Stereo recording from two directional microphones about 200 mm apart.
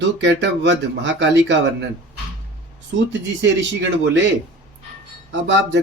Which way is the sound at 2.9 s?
65° right (ahead or behind).